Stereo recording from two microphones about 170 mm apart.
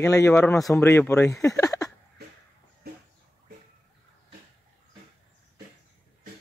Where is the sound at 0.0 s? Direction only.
15° left (ahead or behind).